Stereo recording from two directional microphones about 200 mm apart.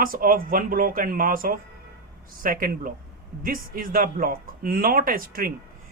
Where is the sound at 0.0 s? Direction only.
45° right (ahead or behind).